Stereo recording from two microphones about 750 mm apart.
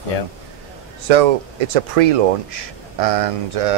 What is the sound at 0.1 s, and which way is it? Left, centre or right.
Speech, left.